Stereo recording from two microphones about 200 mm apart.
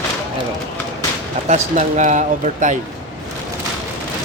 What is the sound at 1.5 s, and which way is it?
Speech, 35° right (ahead or behind).